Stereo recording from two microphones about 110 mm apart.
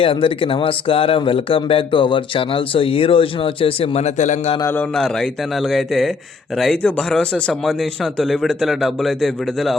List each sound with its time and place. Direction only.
0.0 s speech: 55° left (ahead or behind); by 4.5 s 90° left
4.6 s a man's voice: 15° left (ahead or behind)
4.9 s a man's voice: 5° left (ahead or behind)